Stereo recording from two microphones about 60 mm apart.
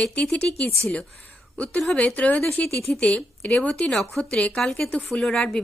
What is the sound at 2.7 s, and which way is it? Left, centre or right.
Speech, centre.